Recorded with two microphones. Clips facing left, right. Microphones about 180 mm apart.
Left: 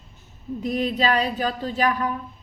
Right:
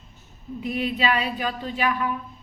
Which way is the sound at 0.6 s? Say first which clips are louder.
Left 2 dB; 40° left (ahead or behind).